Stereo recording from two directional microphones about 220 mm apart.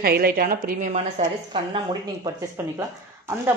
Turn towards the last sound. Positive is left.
turn(degrees=-10)  # may be behind; listen again after turning